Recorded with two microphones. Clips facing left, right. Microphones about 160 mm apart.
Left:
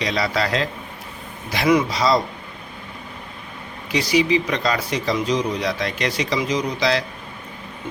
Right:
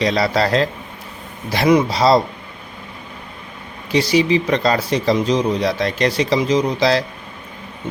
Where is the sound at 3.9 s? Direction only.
30° right (ahead or behind).